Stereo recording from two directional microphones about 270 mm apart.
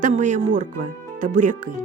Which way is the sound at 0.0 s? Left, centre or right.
Right.